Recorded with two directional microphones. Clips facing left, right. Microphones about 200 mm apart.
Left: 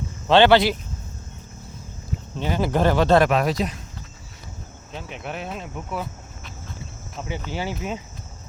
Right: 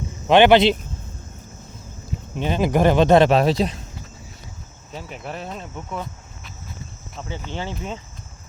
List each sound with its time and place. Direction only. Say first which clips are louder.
0.3 s speech: right 2 dB; 15° right (ahead or behind)
2.3 s speech: right 3 dB; 20° right (ahead or behind)
4.9 s speech: even; centre (ahead or behind)